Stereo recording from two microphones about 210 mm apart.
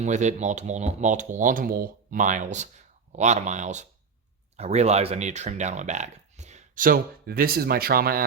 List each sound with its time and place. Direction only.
0.0 s speech: 35° right (ahead or behind)